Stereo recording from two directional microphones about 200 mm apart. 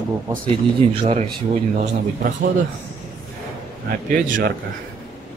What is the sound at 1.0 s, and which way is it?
Speech, 35° right (ahead or behind).